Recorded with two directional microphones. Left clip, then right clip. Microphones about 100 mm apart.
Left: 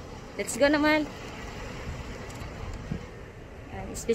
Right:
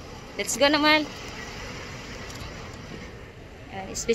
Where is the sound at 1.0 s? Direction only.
Centre (ahead or behind).